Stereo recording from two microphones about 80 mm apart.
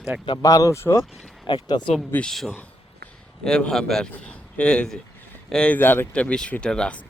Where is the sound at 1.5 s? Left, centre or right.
Left.